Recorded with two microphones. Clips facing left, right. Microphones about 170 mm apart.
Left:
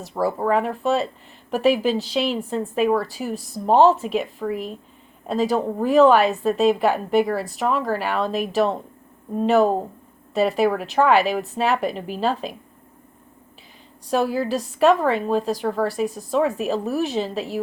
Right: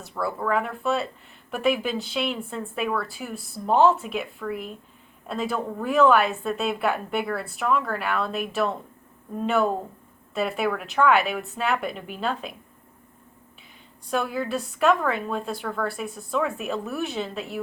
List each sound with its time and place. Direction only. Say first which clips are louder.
0.0 s a woman's voice: left 6 dB; 35° left (ahead or behind)
14.1 s a woman's voice: left 5 dB; 35° left (ahead or behind)